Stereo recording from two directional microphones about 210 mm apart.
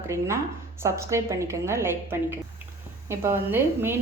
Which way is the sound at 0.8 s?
15° right (ahead or behind).